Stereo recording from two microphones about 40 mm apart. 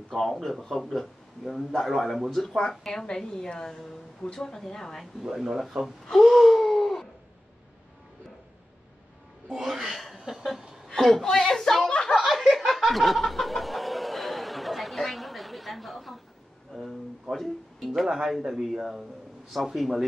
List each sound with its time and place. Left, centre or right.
0.1 s speech: centre
5.2 s speech: centre
6.1 s gasp: centre
9.5 s a sound: centre
10.9 s a woman's voice: centre
12.3 s snicker: centre
16.7 s speech: centre
17.9 s speech: centre